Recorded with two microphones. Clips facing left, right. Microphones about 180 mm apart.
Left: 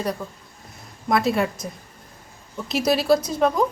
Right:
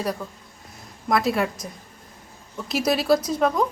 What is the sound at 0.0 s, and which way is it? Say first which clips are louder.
A woman's voice: left 1 dB; centre (ahead or behind).